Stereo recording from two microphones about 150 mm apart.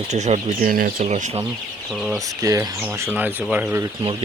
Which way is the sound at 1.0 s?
45° right (ahead or behind).